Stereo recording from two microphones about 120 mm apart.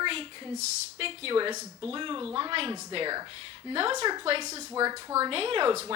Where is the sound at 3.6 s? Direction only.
50° right (ahead or behind).